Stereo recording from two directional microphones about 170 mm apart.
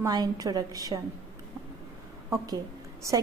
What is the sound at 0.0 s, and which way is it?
A woman's voice, 20° right (ahead or behind).